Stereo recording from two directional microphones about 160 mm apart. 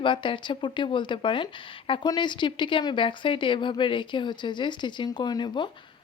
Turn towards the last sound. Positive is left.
turn(degrees=30)  # may be behind; listen again after turning